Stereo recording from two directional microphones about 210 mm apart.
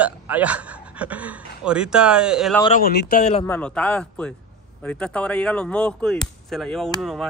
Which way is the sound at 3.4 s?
5° left (ahead or behind).